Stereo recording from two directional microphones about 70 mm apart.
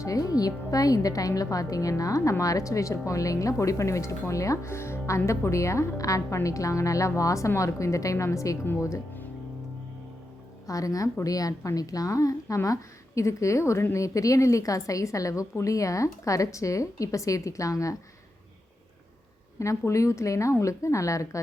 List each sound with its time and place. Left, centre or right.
0.0 s a woman's voice: left
10.7 s a woman's voice: left
19.5 s speech: left